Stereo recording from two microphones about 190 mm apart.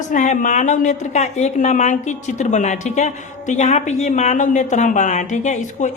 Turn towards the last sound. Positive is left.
turn(degrees=40)  # may be behind; listen again after turning